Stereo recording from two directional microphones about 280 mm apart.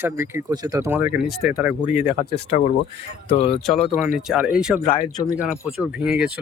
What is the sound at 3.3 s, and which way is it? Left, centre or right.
Speech, left.